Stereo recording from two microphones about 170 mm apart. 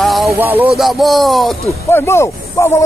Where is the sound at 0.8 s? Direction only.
Centre (ahead or behind).